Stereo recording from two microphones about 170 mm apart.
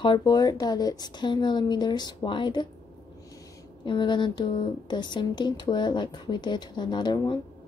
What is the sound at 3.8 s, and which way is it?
Speech, 30° left (ahead or behind).